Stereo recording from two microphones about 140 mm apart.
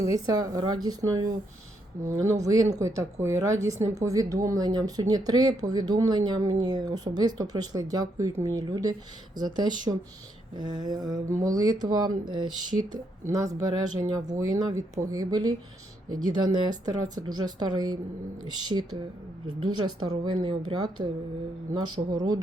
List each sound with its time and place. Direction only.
0.1 s a woman's voice: 25° right (ahead or behind)